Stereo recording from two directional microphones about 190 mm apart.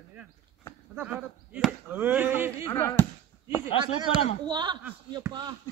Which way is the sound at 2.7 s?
15° left (ahead or behind).